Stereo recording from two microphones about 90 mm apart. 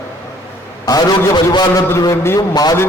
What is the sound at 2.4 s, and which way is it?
Music, 45° left (ahead or behind).